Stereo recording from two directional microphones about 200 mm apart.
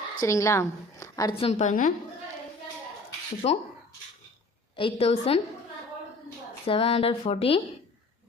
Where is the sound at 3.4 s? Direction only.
30° left (ahead or behind).